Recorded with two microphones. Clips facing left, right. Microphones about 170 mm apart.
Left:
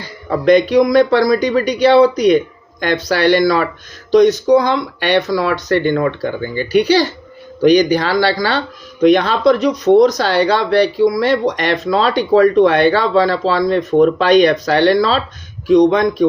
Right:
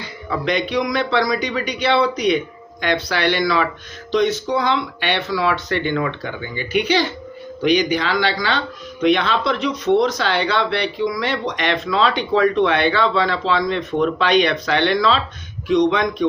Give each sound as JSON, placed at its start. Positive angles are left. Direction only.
{"t": 0.0, "sound": "speech", "side_deg": 45}